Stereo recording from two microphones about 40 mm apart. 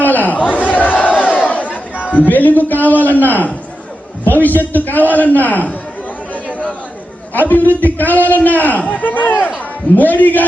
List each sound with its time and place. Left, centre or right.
0.0 s a sound: left
1.2 s crowd: left
2.1 s a man's voice: left
6.3 s chatter: left
7.3 s a man's voice: left